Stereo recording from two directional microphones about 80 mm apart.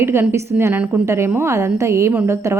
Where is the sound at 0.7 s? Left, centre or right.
Centre.